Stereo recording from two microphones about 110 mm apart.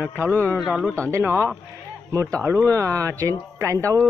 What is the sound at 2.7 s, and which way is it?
Speech, 30° right (ahead or behind).